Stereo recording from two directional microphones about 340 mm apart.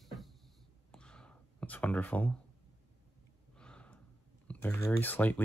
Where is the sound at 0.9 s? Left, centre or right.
Centre.